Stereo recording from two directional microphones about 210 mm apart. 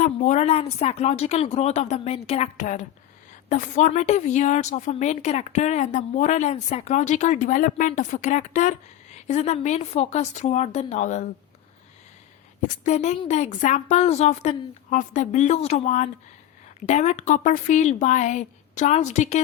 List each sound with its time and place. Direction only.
0.0 s a woman's voice: 35° left (ahead or behind)
12.6 s a woman's voice: 35° left (ahead or behind)